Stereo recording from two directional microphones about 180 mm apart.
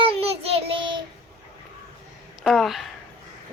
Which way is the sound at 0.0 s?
35° right (ahead or behind).